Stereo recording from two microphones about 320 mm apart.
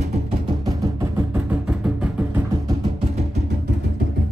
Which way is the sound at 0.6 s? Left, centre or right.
Centre.